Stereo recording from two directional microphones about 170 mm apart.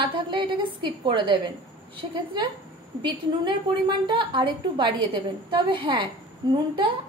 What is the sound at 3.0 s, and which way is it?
A woman's voice, 25° right (ahead or behind).